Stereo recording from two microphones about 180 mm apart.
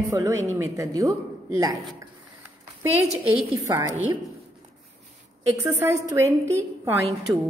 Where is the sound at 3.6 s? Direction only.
20° right (ahead or behind).